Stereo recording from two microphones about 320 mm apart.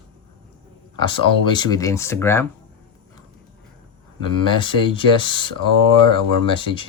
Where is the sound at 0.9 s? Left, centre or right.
Centre.